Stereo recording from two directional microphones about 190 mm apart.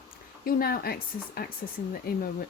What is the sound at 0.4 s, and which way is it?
Speech, 50° left (ahead or behind).